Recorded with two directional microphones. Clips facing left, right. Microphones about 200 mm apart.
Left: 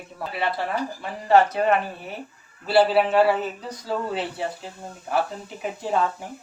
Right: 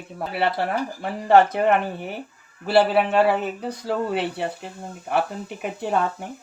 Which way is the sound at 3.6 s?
65° right (ahead or behind).